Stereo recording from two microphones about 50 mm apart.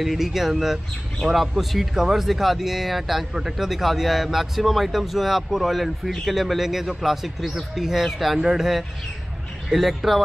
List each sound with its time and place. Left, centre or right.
0.0 s speech: centre